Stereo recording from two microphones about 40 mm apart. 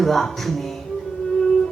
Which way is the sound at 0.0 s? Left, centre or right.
Centre.